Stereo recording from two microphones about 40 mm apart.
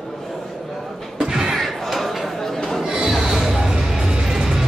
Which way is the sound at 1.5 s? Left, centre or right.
Centre.